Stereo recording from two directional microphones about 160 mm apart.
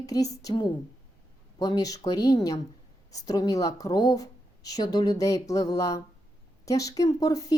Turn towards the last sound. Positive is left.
turn(degrees=20)  # may be behind; listen again after turning